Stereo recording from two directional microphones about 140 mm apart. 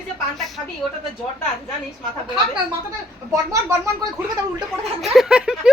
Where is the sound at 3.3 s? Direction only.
20° right (ahead or behind).